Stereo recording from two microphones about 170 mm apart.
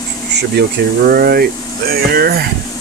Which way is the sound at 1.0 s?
65° right (ahead or behind).